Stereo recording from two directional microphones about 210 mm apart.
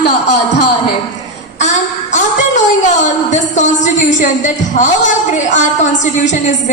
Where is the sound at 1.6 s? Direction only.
35° left (ahead or behind).